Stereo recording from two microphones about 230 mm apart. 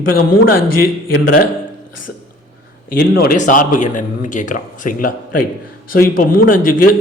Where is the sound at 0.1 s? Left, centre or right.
Left.